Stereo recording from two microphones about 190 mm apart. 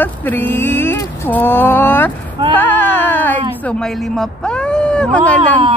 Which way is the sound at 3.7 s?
5° left (ahead or behind).